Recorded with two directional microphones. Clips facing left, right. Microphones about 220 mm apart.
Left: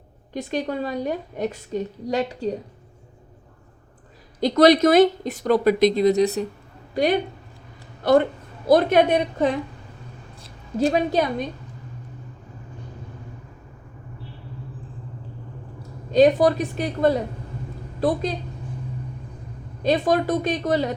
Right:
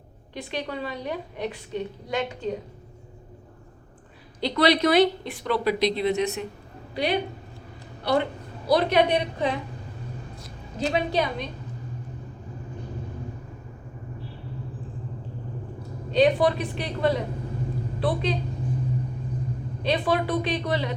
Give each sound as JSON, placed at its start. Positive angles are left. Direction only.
{"t": 0.3, "sound": "speech", "side_deg": 45}
{"t": 4.4, "sound": "a woman's voice", "side_deg": 45}
{"t": 10.8, "sound": "speech", "side_deg": 45}
{"t": 16.1, "sound": "speech", "side_deg": 45}
{"t": 19.8, "sound": "speech", "side_deg": 45}